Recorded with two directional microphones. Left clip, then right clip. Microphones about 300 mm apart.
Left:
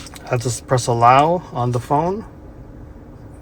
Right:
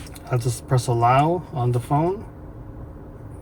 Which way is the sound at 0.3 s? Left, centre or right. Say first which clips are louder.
Left 6 dB; left.